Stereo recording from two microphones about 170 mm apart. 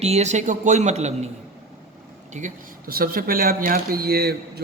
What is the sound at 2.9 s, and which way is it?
Speech, 60° right (ahead or behind).